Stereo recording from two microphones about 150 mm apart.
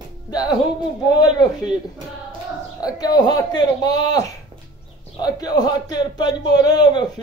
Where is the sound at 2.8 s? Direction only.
25° left (ahead or behind).